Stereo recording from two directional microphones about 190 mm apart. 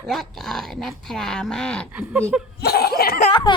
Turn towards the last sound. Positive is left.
turn(degrees=25)  # may be behind; listen again after turning